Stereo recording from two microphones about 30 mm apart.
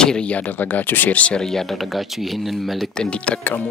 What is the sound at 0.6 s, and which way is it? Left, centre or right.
Speech, left.